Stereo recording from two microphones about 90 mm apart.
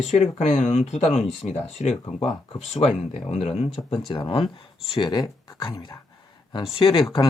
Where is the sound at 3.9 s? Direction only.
65° left (ahead or behind).